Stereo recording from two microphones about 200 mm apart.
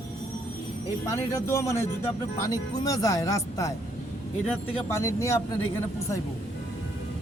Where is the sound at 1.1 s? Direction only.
15° left (ahead or behind).